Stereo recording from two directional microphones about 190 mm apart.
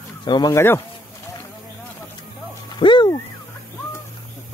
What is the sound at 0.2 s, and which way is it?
Speech, 20° left (ahead or behind).